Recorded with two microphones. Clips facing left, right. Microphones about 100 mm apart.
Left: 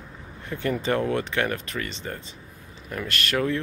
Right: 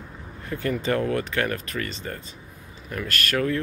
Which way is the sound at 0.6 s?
25° left (ahead or behind).